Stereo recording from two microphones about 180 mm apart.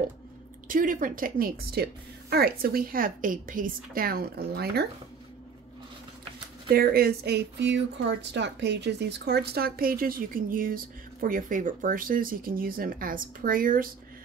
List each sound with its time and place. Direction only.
0.7 s speech: 50° right (ahead or behind)
6.7 s speech: 60° right (ahead or behind)